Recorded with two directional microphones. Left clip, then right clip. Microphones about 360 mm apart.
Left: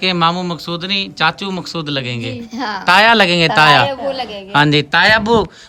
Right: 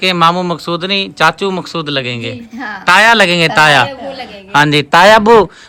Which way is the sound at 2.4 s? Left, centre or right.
Centre.